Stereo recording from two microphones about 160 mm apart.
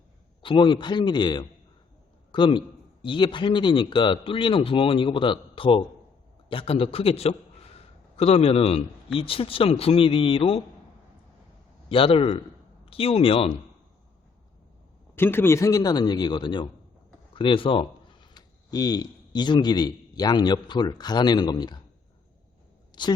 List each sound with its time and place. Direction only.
0.4 s a man's voice: 30° left (ahead or behind)
11.9 s a man's voice: 35° left (ahead or behind)
15.1 s a man's voice: 15° left (ahead or behind)
22.9 s a sound: 25° left (ahead or behind)